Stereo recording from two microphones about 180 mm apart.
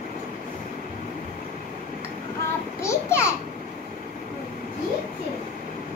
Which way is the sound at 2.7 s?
15° left (ahead or behind).